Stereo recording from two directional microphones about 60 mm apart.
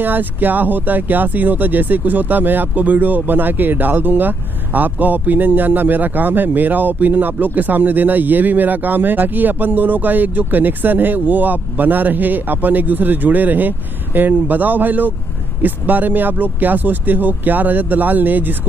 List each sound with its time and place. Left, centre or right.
0.0 s speech: right